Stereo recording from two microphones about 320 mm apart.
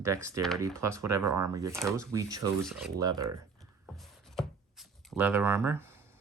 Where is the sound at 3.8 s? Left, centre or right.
Centre.